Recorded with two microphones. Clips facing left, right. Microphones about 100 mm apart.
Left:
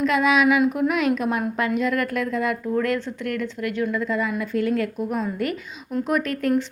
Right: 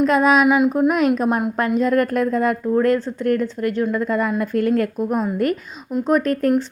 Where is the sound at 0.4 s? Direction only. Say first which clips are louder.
Right 3 dB; 20° right (ahead or behind).